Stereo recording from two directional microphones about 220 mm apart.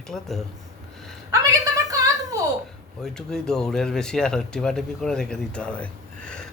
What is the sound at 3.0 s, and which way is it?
Speech, 5° left (ahead or behind).